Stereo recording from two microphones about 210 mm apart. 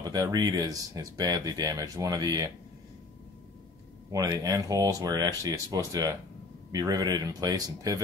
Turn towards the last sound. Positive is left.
turn(degrees=-20)  # may be behind; listen again after turning